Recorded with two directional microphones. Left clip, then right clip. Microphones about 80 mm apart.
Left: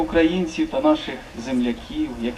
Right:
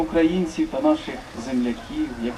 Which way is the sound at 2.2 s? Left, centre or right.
Left.